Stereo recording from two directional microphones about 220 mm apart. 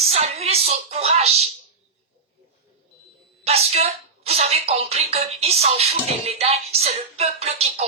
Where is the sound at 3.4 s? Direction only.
30° right (ahead or behind).